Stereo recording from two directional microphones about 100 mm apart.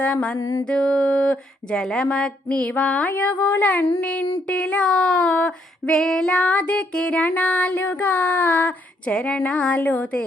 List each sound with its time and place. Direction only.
0.0 s female singing: 10° left (ahead or behind)
0.3 s mantra: 40° left (ahead or behind)
0.7 s female singing: 10° left (ahead or behind)